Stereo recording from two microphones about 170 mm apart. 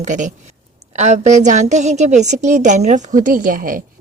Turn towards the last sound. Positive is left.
turn(degrees=-55)  # may be behind; listen again after turning